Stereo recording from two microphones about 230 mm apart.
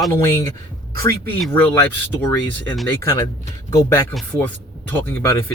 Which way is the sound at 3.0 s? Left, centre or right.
Centre.